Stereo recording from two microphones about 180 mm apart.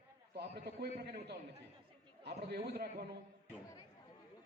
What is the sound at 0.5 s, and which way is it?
A man's voice, 60° right (ahead or behind).